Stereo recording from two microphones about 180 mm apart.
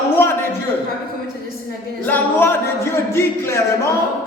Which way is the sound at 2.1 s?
10° left (ahead or behind).